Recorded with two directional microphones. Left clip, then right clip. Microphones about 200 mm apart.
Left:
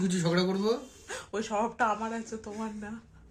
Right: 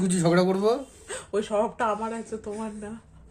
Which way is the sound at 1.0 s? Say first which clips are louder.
Right 6 dB; 5° left (ahead or behind).